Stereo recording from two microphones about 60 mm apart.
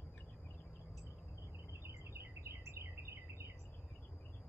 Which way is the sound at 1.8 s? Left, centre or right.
Right.